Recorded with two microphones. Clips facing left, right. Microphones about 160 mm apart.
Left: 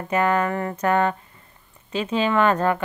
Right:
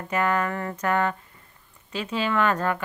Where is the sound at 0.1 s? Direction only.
25° left (ahead or behind).